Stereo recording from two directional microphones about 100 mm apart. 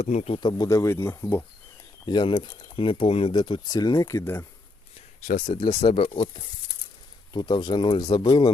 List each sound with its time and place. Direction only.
0.0 s speech: 90° left
0.3 s speech: 45° left (ahead or behind)
0.7 s speech: 30° left (ahead or behind)
2.0 s speech: 55° left (ahead or behind); by 3.3 s 80° left
3.3 s speech: 50° left (ahead or behind)
3.8 s speech: 35° left (ahead or behind)
5.5 s speech: 55° left (ahead or behind)
5.8 s speech: 90° left
7.3 s speech: 50° left (ahead or behind)